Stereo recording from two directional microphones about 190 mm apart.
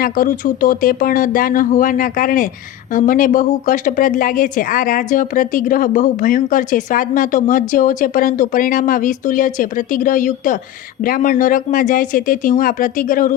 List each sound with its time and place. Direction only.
0.0 s speech: 45° left (ahead or behind)